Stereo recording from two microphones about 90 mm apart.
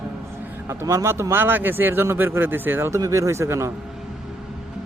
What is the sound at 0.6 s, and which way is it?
A man's voice, 35° right (ahead or behind).